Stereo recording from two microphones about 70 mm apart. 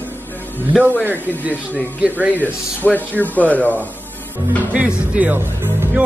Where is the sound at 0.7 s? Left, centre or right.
Centre.